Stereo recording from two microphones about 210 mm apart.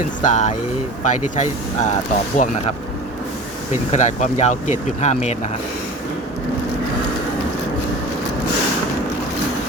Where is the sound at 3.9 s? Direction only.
35° left (ahead or behind).